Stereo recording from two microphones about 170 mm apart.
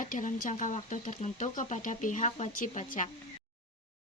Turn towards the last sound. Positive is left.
turn(degrees=50)  # may be behind; listen again after turning